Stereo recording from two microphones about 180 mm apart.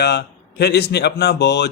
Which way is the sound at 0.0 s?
65° left (ahead or behind).